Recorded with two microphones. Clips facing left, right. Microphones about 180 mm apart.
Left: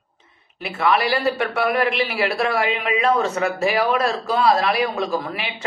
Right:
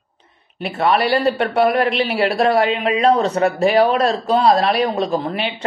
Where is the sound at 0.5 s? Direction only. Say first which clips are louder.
Right 3 dB; 30° right (ahead or behind).